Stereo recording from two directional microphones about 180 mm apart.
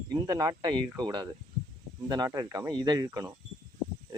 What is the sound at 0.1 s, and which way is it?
Speech, 20° right (ahead or behind).